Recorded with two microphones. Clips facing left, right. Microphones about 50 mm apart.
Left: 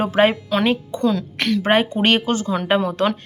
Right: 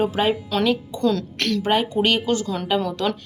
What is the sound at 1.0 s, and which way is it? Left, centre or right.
Speech, centre.